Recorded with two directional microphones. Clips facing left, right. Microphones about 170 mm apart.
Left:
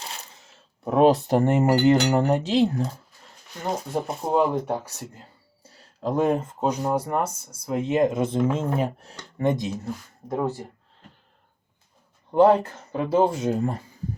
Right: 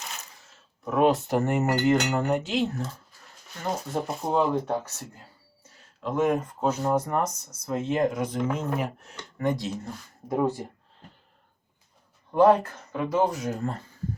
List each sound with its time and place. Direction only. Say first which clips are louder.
0.0 s coin: left 2 dB; 30° left (ahead or behind)
0.9 s speech: left 4 dB; 35° left (ahead or behind)
4.2 s speech: left 2 dB; 20° left (ahead or behind)
5.6 s speech: left 5 dB; 35° left (ahead or behind)
9.6 s speech: left 3 dB; 5° left (ahead or behind)
10.2 s speech: right 1 dB; 10° right (ahead or behind)
12.3 s speech: left 2 dB; 25° left (ahead or behind)